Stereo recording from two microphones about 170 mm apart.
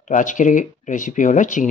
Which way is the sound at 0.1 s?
50° left (ahead or behind).